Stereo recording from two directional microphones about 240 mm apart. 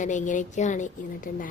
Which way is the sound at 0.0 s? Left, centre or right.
Left.